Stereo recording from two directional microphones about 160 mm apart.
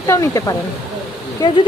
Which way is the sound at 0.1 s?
20° left (ahead or behind).